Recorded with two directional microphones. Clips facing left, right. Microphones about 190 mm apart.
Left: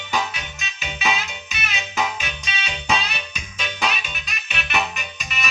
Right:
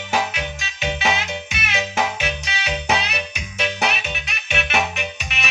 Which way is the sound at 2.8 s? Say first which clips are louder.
Left 1 dB; 70° right (ahead or behind).